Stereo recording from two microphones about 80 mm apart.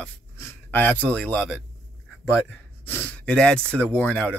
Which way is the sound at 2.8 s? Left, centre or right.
Left.